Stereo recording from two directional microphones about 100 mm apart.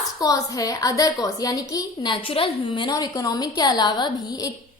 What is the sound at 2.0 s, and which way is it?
Speech, 65° left (ahead or behind).